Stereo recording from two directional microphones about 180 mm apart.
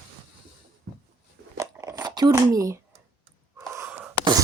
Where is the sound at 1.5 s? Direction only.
20° right (ahead or behind).